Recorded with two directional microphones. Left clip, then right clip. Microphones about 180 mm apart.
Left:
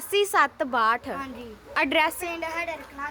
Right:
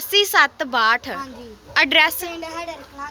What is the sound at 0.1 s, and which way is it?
A woman's voice, 10° left (ahead or behind).